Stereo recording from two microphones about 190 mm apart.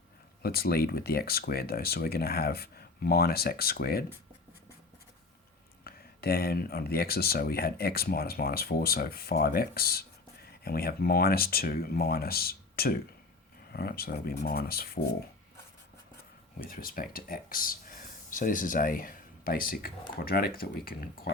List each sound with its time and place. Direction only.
0.4 s speech: 55° left (ahead or behind)
5.8 s speech: 55° left (ahead or behind)
16.6 s speech: 50° left (ahead or behind)